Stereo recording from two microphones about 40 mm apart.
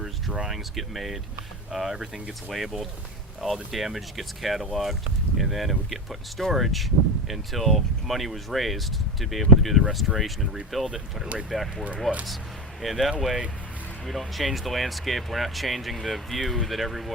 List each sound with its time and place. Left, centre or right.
0.4 s speech: centre
10.9 s speech: centre
11.4 s speech: centre